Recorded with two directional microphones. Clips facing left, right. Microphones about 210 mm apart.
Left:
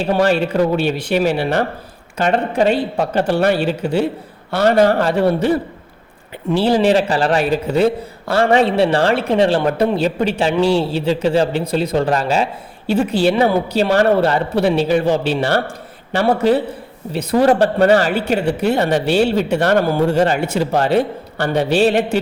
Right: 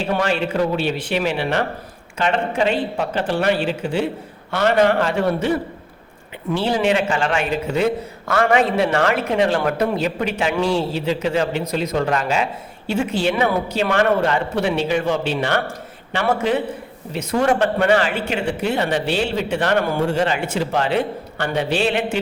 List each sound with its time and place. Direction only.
0.1 s a woman's voice: 35° left (ahead or behind)